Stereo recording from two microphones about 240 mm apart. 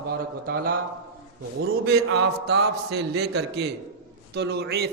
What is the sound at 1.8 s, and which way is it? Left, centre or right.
A man's voice, right.